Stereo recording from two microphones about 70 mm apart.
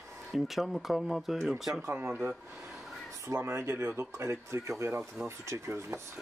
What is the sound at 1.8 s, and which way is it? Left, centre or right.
Speech, right.